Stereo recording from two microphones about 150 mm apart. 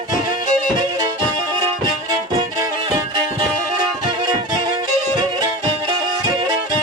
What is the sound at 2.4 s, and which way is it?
Music, 25° right (ahead or behind).